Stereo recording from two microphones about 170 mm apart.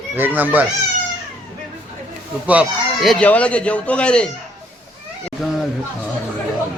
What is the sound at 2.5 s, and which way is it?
Speech, 5° right (ahead or behind).